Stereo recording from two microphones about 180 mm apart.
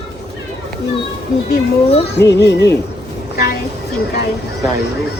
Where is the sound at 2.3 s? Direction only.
70° left (ahead or behind).